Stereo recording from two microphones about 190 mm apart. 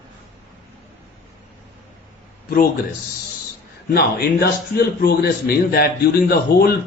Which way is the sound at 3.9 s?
55° left (ahead or behind).